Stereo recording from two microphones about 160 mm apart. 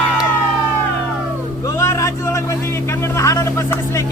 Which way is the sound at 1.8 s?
15° left (ahead or behind).